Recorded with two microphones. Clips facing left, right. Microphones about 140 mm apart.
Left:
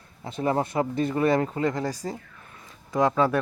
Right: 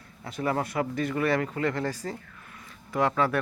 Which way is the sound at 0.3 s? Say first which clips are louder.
Left 3 dB; 25° left (ahead or behind).